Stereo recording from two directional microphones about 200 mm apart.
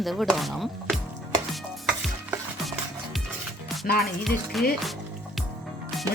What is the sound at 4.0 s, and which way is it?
Speech, centre (ahead or behind).